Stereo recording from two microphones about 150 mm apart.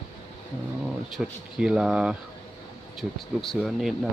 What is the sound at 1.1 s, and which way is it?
Speech, 5° right (ahead or behind).